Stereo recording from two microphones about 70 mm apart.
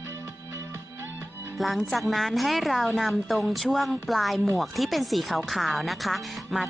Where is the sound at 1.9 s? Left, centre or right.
Centre.